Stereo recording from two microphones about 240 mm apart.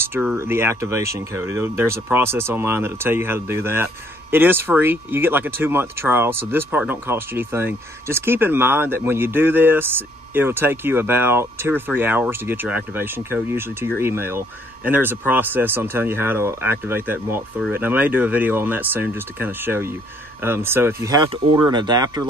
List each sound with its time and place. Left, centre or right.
0.1 s speech: centre